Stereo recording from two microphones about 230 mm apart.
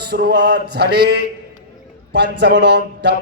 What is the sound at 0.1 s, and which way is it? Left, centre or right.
Mantra, right.